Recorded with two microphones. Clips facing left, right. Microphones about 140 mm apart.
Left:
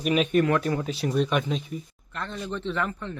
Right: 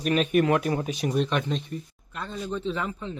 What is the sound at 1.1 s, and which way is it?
Speech, 5° left (ahead or behind).